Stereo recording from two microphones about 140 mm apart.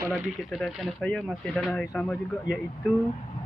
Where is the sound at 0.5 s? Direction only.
Centre (ahead or behind).